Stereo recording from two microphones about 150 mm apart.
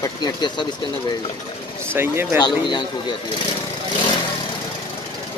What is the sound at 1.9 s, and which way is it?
Speech, 15° right (ahead or behind).